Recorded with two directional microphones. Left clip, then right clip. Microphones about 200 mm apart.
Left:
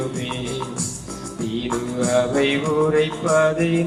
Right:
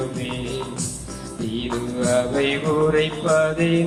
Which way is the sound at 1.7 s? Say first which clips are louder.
Even; 35° left (ahead or behind).